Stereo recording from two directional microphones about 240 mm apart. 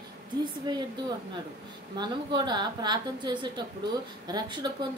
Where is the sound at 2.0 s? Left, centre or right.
Centre.